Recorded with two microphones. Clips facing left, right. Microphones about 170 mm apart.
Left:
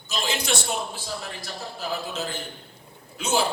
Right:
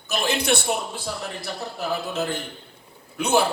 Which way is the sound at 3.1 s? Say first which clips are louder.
Right 4 dB; 60° right (ahead or behind).